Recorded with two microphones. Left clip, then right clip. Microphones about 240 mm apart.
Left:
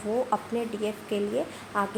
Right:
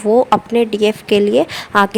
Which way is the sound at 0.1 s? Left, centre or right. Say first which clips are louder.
Right 15 dB; right.